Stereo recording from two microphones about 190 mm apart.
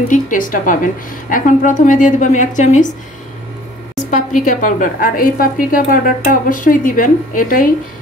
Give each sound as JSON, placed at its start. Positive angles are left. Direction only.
{"t": 0.1, "sound": "a woman's voice", "side_deg": 45}
{"t": 4.1, "sound": "a woman's voice", "side_deg": 45}